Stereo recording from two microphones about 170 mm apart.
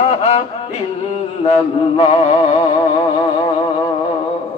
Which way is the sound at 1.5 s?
40° left (ahead or behind).